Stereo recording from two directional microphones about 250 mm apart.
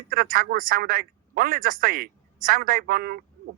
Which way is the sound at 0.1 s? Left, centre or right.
Right.